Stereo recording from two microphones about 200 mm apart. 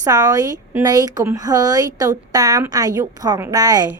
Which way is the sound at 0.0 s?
15° right (ahead or behind).